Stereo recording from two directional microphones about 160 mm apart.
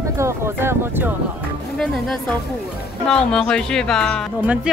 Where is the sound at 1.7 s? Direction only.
5° left (ahead or behind).